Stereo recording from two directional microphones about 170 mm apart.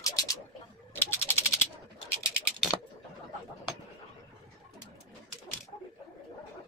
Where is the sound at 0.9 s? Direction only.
15° left (ahead or behind).